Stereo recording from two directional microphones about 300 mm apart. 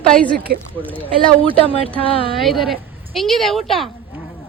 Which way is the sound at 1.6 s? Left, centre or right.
Centre.